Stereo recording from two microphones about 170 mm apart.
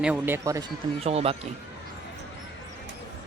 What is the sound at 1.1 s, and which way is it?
Speech, 35° right (ahead or behind).